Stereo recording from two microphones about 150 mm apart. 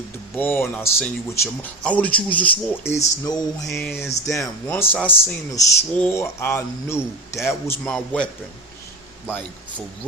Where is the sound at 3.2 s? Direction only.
25° left (ahead or behind).